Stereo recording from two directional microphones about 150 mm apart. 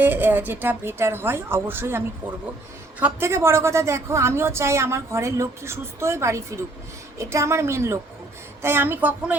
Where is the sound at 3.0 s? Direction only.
15° right (ahead or behind).